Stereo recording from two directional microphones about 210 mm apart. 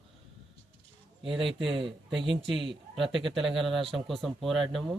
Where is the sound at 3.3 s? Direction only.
Centre (ahead or behind).